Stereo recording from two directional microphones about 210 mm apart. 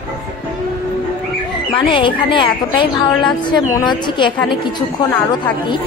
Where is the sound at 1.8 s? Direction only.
25° left (ahead or behind).